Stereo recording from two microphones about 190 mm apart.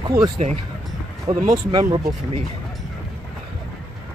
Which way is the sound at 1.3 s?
35° right (ahead or behind).